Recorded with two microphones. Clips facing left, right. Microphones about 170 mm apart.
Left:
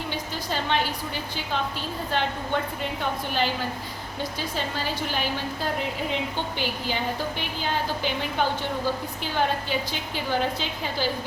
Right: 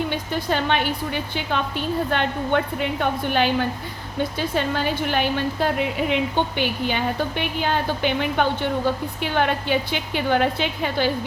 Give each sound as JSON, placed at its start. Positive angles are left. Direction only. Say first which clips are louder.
{"t": 0.1, "sound": "a woman's voice", "louder": "right 6 dB", "side_deg": -60}